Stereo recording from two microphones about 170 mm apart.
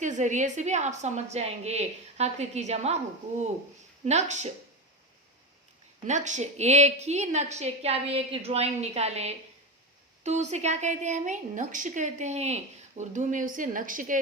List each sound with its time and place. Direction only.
0.0 s a woman's voice: 45° right (ahead or behind)
4.0 s a woman's voice: 40° right (ahead or behind)
6.1 s a woman's voice: 45° right (ahead or behind)